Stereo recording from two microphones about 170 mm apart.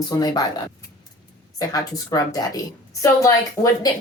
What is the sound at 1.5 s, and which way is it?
A woman's voice, 20° left (ahead or behind).